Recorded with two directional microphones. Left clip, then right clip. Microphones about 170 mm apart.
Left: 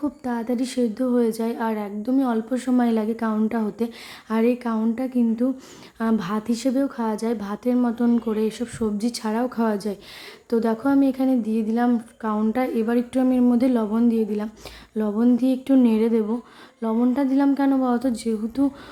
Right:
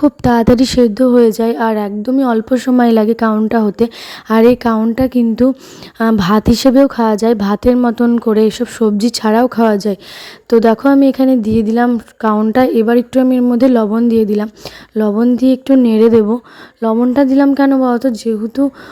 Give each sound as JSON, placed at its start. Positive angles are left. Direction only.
{"t": 0.0, "sound": "a woman's voice", "side_deg": -55}